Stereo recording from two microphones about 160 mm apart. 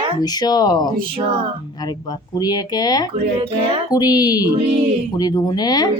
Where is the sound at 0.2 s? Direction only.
25° left (ahead or behind).